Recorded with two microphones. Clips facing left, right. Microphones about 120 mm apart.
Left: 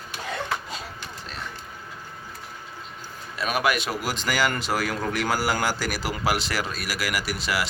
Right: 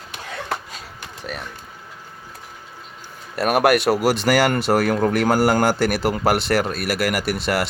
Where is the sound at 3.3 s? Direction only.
70° right (ahead or behind).